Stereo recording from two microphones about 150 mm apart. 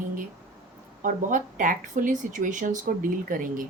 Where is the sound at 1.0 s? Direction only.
60° right (ahead or behind).